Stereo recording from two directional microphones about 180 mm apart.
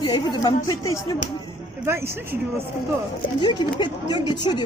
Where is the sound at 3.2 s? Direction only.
25° left (ahead or behind).